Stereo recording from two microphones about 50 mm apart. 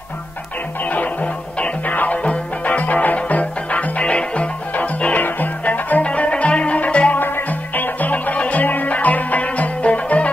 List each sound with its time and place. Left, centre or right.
0.8 s music: left
7.2 s music: left